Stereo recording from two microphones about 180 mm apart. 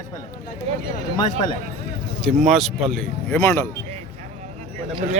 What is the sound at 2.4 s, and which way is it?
Speech, centre (ahead or behind).